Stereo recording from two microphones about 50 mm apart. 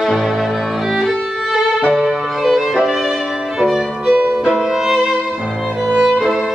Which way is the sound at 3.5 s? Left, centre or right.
Centre.